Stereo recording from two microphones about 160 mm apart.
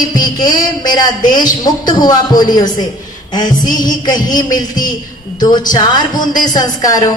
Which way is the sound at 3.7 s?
55° left (ahead or behind).